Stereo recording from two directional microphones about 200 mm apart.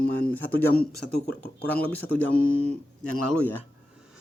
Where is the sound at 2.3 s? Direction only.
80° left.